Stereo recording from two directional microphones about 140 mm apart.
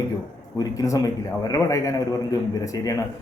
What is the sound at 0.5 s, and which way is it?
A man's voice, 25° left (ahead or behind).